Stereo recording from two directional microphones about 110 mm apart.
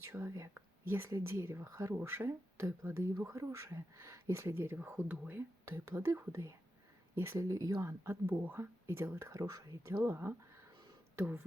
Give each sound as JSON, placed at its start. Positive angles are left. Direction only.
{"t": 0.1, "sound": "speech", "side_deg": -30}
{"t": 10.0, "sound": "speech", "side_deg": -20}